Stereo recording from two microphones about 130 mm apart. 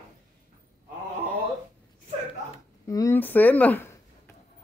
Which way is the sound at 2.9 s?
30° left (ahead or behind).